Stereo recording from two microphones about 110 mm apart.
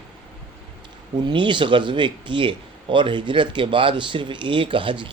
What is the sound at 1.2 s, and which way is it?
A man's voice, 45° right (ahead or behind).